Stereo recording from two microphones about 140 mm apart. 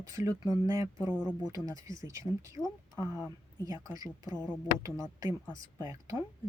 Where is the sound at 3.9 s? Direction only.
25° right (ahead or behind).